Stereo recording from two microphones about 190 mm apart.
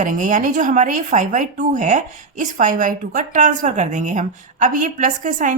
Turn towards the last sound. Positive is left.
turn(degrees=-45)  # may be behind; listen again after turning